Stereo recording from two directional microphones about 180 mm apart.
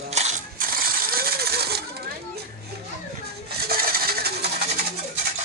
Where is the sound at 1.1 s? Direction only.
60° right (ahead or behind).